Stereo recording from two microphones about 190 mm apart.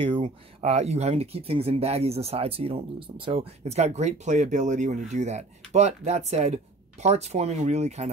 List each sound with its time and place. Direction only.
0.0 s speech: 25° right (ahead or behind)